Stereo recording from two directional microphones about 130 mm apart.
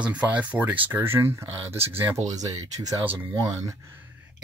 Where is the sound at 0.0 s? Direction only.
10° right (ahead or behind); by 3.7 s 25° right (ahead or behind).